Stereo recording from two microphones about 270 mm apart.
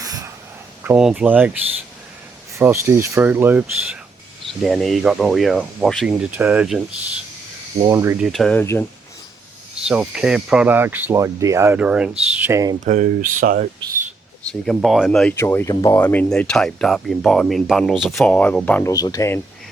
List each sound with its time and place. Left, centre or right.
0.0 s a sound: centre
0.9 s speech: centre
2.6 s speech: centre
9.8 s speech: centre
12.8 s speech: right
14.7 s speech: centre